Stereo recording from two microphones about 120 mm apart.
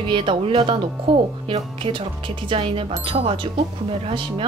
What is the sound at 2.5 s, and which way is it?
Speech, 50° right (ahead or behind).